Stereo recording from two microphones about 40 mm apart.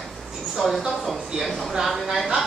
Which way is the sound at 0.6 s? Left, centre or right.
Centre.